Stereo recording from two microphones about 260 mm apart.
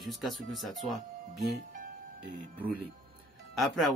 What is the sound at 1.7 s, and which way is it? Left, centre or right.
Music, right.